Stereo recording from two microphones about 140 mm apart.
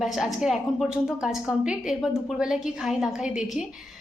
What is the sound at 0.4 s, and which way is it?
A woman's voice, centre (ahead or behind).